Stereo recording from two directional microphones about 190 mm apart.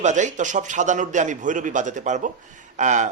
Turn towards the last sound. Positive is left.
turn(degrees=-40)  # may be behind; listen again after turning